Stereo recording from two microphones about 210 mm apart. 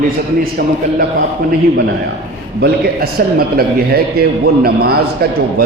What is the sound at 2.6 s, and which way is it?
Speech, 45° right (ahead or behind).